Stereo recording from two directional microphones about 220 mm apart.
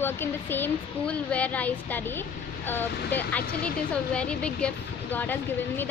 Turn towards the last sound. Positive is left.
turn(degrees=10)  # may be behind; listen again after turning